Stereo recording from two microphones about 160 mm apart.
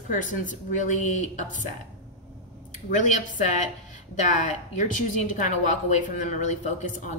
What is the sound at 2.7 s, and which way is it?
Speech, 50° left (ahead or behind).